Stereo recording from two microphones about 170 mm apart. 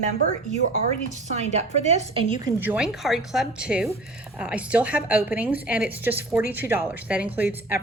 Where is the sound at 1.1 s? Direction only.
45° right (ahead or behind).